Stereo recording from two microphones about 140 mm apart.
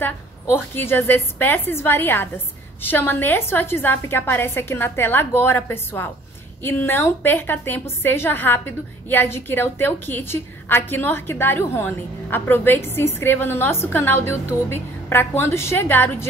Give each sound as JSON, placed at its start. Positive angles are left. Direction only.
{"t": 0.0, "sound": "a woman's voice", "side_deg": 15}